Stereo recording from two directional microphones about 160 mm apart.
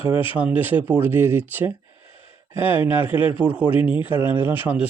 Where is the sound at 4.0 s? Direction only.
10° right (ahead or behind).